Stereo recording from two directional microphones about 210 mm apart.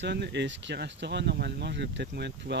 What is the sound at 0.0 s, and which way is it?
Speech, 55° right (ahead or behind).